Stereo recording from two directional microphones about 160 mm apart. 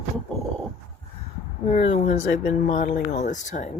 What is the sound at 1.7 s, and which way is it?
Speech, 40° left (ahead or behind).